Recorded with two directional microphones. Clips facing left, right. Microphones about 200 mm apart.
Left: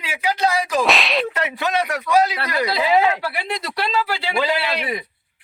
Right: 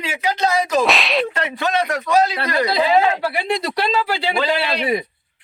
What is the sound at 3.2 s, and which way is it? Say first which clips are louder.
Speech: right 5 dB; 25° right (ahead or behind).